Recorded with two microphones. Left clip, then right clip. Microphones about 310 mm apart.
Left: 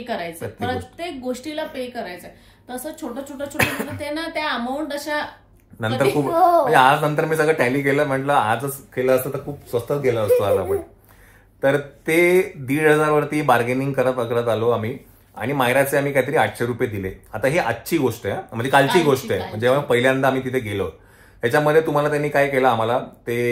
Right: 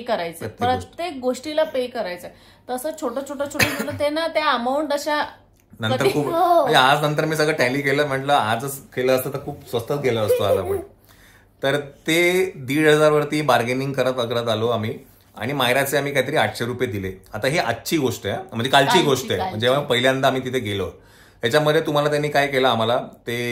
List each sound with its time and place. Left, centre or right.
0.0 s a woman's voice: centre
6.2 s speech: centre